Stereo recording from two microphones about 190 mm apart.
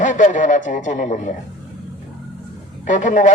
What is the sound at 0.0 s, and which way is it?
Speech, 40° left (ahead or behind).